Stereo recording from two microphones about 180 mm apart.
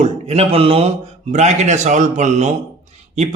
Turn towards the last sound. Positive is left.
turn(degrees=-40)  # may be behind; listen again after turning